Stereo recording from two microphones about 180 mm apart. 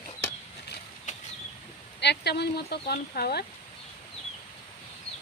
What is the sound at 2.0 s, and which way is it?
Speech, 70° left (ahead or behind).